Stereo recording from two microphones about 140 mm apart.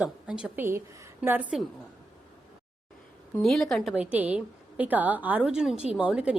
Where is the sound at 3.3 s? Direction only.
5° left (ahead or behind).